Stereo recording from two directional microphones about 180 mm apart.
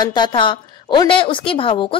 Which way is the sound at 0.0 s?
25° left (ahead or behind).